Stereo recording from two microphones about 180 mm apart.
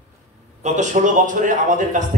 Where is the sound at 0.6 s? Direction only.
45° right (ahead or behind).